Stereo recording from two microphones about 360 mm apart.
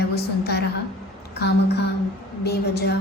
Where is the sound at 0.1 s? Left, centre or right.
Left.